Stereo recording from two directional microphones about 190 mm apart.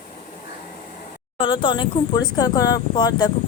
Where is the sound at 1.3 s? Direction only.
25° left (ahead or behind).